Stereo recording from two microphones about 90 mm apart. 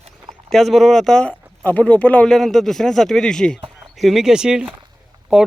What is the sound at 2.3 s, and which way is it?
Speech, 5° left (ahead or behind).